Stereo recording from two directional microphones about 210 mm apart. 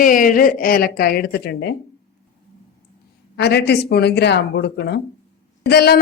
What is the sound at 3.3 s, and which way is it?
A woman's voice, 50° left (ahead or behind).